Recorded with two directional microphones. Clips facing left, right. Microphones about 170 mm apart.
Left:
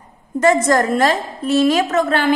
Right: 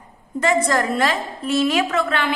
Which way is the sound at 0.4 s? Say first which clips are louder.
Left 5 dB; 45° left (ahead or behind).